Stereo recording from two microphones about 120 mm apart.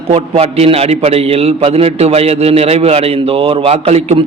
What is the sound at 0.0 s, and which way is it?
A man's voice, 55° right (ahead or behind).